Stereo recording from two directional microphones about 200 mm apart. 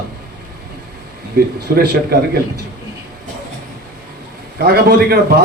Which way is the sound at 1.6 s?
50° right (ahead or behind).